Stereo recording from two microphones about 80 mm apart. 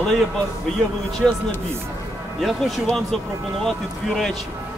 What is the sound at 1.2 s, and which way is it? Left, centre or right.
Speech, centre.